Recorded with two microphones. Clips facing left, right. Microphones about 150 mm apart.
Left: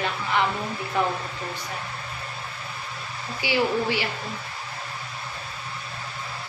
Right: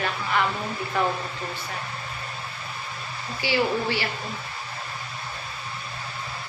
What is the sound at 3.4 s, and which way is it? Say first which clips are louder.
Speech: left 1 dB; 15° left (ahead or behind).